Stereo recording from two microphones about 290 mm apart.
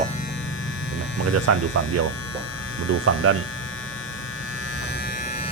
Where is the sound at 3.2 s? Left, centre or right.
Right.